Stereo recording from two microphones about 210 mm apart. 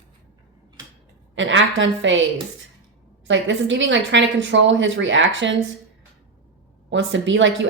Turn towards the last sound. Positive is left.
turn(degrees=-60)  # may be behind; listen again after turning